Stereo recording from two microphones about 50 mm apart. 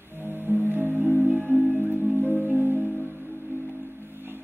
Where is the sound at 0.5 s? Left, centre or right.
Right.